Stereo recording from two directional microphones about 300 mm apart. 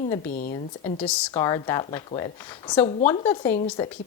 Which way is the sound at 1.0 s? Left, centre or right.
Centre.